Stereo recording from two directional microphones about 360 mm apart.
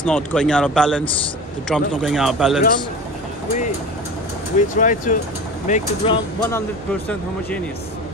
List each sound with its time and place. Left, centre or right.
0.0 s speech: centre
4.6 s speech: left